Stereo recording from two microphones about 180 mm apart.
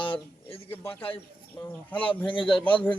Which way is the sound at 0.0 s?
30° left (ahead or behind).